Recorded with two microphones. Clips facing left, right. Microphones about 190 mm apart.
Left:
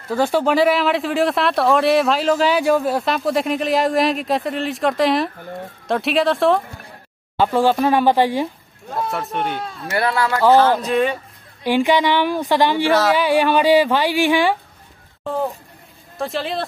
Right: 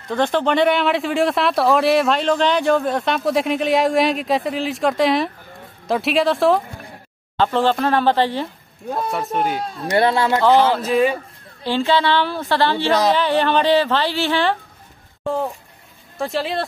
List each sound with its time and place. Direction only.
0.1 s speech: 5° left (ahead or behind)
7.3 s speech: 10° left (ahead or behind)
9.1 s speech: centre (ahead or behind)
9.8 s speech: 30° right (ahead or behind)
10.8 s speech: 5° right (ahead or behind)
11.6 s speech: 15° left (ahead or behind)
16.2 s speech: centre (ahead or behind)